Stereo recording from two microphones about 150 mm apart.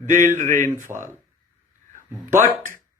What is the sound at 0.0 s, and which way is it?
Speech, 55° right (ahead or behind).